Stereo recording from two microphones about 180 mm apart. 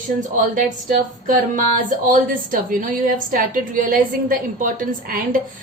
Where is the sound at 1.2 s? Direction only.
45° right (ahead or behind).